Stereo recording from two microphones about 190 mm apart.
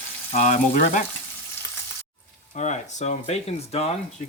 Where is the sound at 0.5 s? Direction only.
45° left (ahead or behind).